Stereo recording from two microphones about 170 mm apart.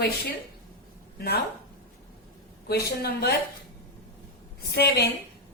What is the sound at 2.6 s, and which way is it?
Speech, 70° left (ahead or behind).